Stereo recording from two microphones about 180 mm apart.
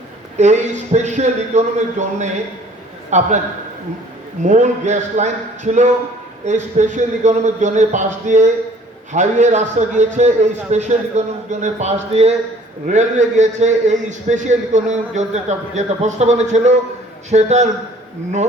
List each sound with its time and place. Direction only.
0.3 s a man's voice: 40° right (ahead or behind)
4.4 s a man's voice: 40° right (ahead or behind)